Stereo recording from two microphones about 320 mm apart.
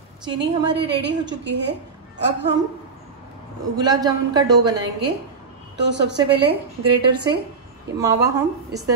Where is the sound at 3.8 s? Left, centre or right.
Centre.